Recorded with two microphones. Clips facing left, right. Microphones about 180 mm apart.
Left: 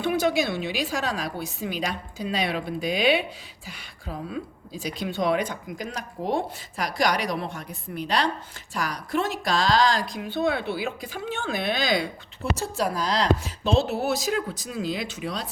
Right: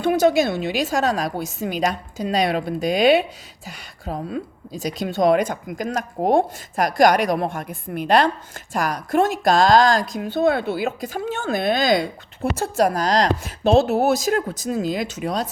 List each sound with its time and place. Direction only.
0.0 s a woman's voice: 45° right (ahead or behind)